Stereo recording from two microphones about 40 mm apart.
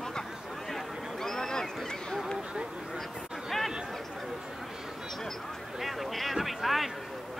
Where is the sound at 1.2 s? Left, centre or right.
Centre.